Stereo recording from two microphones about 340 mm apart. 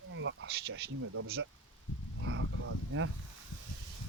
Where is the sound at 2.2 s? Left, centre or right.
Right.